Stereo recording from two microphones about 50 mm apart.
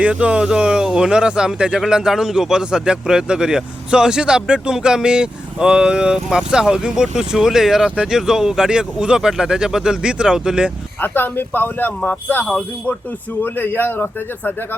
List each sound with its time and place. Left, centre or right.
0.0 s a man's voice: right
11.0 s speech: left